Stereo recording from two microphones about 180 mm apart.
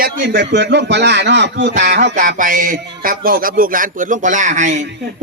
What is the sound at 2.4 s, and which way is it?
A man's voice, 50° right (ahead or behind).